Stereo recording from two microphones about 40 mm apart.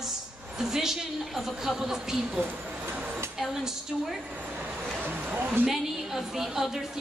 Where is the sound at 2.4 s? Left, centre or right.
Right.